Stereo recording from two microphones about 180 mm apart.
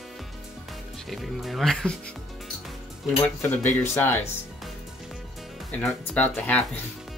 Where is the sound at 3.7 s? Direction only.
15° left (ahead or behind).